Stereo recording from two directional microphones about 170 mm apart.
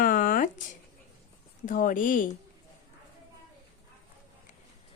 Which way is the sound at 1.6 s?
50° left (ahead or behind).